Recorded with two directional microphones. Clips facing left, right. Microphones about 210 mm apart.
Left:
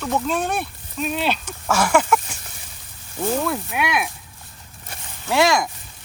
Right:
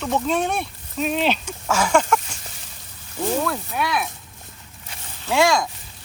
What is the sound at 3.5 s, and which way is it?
Speech, 15° left (ahead or behind).